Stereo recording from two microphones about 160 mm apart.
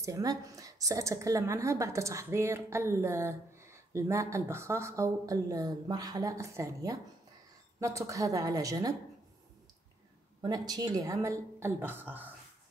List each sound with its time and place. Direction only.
0.0 s a woman's voice: 20° right (ahead or behind)
10.4 s a woman's voice: 25° right (ahead or behind)